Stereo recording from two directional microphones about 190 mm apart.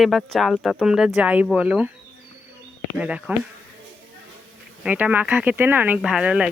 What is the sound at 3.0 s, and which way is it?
Speech, 5° right (ahead or behind).